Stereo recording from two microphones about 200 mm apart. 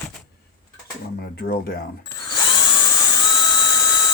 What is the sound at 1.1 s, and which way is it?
Speech, 50° left (ahead or behind).